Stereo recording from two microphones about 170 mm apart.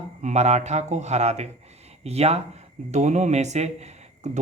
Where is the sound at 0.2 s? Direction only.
45° right (ahead or behind).